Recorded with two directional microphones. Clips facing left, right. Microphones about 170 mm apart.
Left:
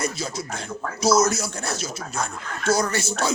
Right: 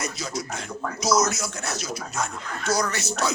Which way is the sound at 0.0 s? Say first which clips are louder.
Left 3 dB; 30° left (ahead or behind).